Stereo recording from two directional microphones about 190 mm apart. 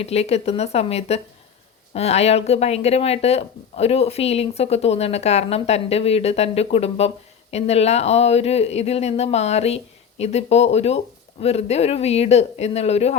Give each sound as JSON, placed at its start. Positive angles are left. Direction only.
{"t": 0.0, "sound": "speech", "side_deg": 35}